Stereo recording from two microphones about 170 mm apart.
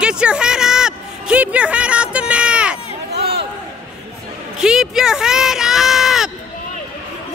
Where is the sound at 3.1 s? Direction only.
70° right (ahead or behind).